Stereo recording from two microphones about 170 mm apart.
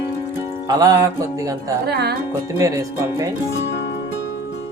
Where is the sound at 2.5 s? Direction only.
20° right (ahead or behind).